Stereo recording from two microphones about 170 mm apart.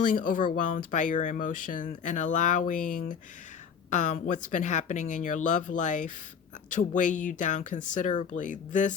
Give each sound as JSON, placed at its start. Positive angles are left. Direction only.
{"t": 0.0, "sound": "speech", "side_deg": 55}